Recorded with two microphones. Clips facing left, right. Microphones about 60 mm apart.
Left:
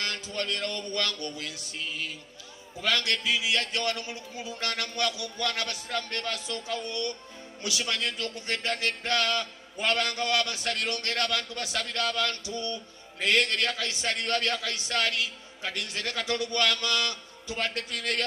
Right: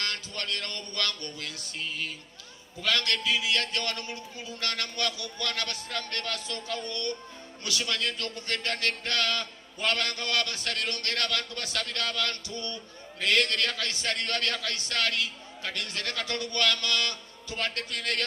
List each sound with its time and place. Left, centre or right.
0.0 s a man's voice: left
2.8 s a man's voice: left